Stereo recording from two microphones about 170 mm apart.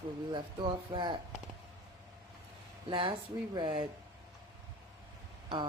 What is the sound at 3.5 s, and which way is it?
Speech, 25° right (ahead or behind).